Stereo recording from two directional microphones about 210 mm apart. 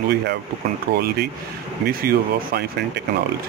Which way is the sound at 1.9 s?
45° right (ahead or behind).